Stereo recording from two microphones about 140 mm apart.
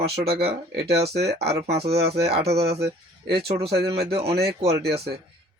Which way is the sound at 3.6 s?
45° right (ahead or behind).